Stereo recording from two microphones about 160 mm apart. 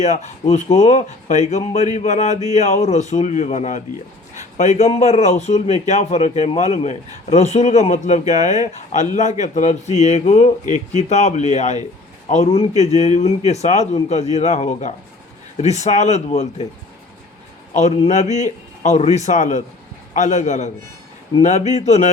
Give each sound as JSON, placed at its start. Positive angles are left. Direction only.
{"t": 0.0, "sound": "speech", "side_deg": 45}
{"t": 17.7, "sound": "speech", "side_deg": 45}
{"t": 21.3, "sound": "speech", "side_deg": 30}
{"t": 21.7, "sound": "speech", "side_deg": 45}